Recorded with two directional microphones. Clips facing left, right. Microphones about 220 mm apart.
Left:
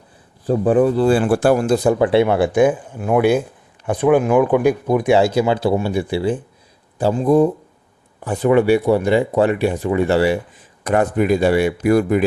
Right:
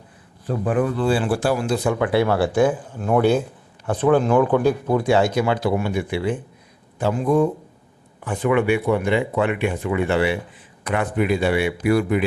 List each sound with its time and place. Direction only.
0.4 s speech: 30° left (ahead or behind)
1.0 s speech: 50° left (ahead or behind)